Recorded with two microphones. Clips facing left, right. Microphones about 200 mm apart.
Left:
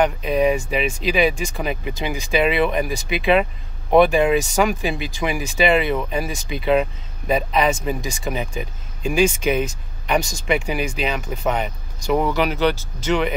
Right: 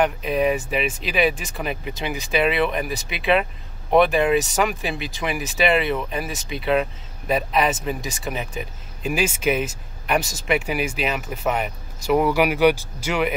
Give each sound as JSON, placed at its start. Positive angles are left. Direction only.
{"t": 0.0, "sound": "speech", "side_deg": 0}